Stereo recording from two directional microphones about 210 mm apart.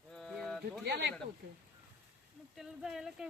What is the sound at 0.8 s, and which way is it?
Speech, 50° right (ahead or behind).